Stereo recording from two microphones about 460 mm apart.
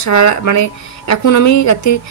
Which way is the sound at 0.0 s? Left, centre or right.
Left.